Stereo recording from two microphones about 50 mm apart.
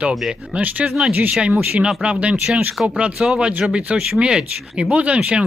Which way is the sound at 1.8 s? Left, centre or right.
Centre.